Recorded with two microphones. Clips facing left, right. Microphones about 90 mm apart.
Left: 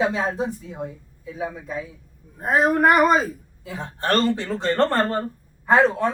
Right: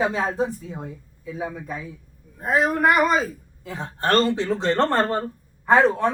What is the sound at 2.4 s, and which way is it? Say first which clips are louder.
Speech: left 2 dB; 40° left (ahead or behind).